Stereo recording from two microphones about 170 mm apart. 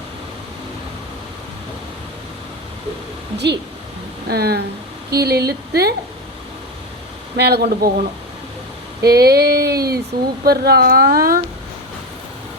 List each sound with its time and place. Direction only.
3.3 s speech: 85° right
4.3 s female singing: 70° right (ahead or behind)
7.3 s female singing: 70° right (ahead or behind)
9.0 s female singing: 70° right (ahead or behind)
10.4 s a woman's voice: 65° right (ahead or behind)